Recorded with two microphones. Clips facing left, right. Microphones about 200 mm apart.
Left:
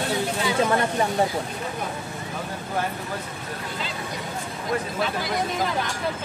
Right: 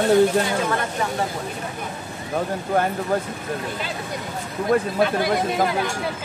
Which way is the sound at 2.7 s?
50° right (ahead or behind).